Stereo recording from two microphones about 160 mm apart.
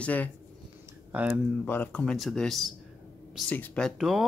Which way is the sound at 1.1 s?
10° right (ahead or behind).